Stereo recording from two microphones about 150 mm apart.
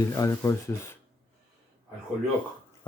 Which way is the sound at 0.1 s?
20° left (ahead or behind).